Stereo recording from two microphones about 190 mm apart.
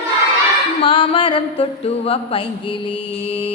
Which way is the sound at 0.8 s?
30° left (ahead or behind).